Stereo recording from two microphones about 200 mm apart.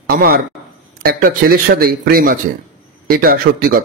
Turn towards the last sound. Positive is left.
turn(degrees=-50)  # may be behind; listen again after turning